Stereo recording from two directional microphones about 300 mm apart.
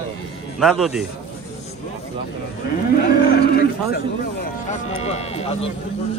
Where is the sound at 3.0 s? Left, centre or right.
Left.